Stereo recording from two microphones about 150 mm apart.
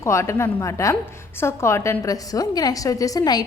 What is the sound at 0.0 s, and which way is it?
A woman's voice, 20° left (ahead or behind).